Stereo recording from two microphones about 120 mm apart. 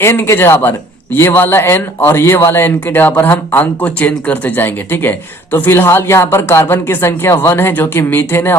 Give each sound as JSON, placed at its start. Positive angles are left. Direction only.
{"t": 0.0, "sound": "speech", "side_deg": 20}